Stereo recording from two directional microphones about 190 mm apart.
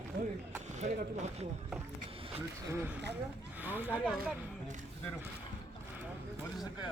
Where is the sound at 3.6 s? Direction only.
10° right (ahead or behind).